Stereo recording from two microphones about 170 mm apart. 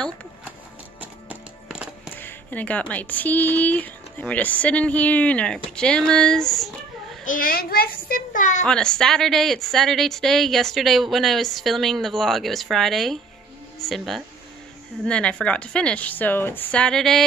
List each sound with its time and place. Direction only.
1.0 s music: 5° right (ahead or behind)
2.1 s speech: 10° left (ahead or behind)
7.2 s a child's voice: 55° left (ahead or behind)
8.6 s speech: 5° left (ahead or behind)